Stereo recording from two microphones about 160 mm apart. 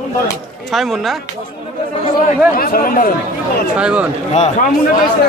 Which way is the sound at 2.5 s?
65° left (ahead or behind).